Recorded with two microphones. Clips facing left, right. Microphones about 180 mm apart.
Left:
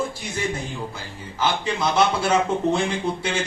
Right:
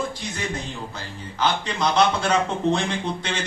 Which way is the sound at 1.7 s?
5° left (ahead or behind).